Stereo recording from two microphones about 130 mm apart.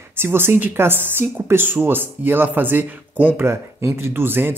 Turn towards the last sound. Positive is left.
turn(degrees=-15)  # may be behind; listen again after turning